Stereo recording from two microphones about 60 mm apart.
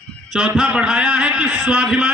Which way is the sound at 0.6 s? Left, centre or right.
Centre.